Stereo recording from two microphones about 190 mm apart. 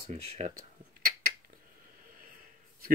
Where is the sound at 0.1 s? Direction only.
35° right (ahead or behind).